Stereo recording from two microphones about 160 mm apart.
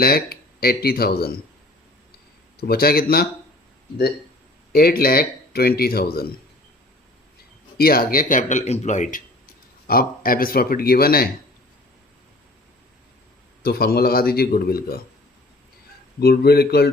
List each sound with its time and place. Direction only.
0.0 s a man's voice: 70° left (ahead or behind)
2.6 s a man's voice: 70° left (ahead or behind)
4.7 s a man's voice: 70° left (ahead or behind)
7.8 s speech: 70° left (ahead or behind); by 9.2 s 50° left (ahead or behind)
9.8 s a man's voice: 65° left (ahead or behind)
13.6 s a man's voice: 75° left (ahead or behind)
16.2 s speech: 80° left